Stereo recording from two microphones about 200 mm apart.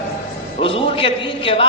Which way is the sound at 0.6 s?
25° left (ahead or behind).